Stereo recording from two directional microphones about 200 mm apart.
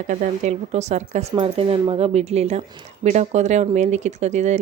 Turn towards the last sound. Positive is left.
turn(degrees=-35)  # may be behind; listen again after turning